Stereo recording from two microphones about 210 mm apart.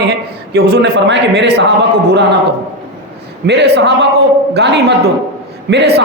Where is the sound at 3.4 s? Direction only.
50° right (ahead or behind).